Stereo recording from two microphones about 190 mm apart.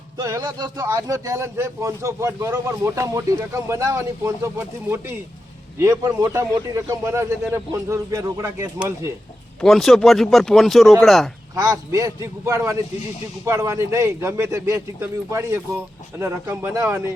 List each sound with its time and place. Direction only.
0.2 s speech: 20° right (ahead or behind)
6.1 s speech: 15° right (ahead or behind)
9.6 s speech: centre (ahead or behind)
11.5 s speech: 15° right (ahead or behind)